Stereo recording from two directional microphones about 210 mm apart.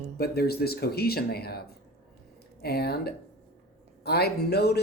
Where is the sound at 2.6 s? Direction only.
50° left (ahead or behind).